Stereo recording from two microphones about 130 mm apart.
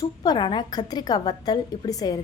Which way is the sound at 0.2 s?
35° left (ahead or behind).